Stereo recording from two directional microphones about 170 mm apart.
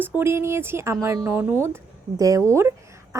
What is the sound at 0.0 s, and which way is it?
A woman's voice, 15° right (ahead or behind).